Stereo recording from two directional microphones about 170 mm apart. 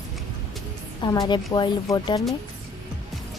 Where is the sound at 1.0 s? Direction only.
25° left (ahead or behind).